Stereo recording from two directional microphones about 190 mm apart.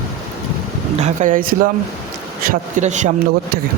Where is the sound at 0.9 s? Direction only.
40° right (ahead or behind).